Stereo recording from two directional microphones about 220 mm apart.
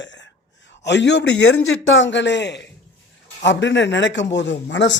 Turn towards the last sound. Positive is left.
turn(degrees=55)  # may be behind; listen again after turning